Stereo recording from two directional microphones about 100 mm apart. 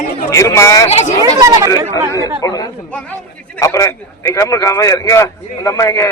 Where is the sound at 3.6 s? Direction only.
30° left (ahead or behind).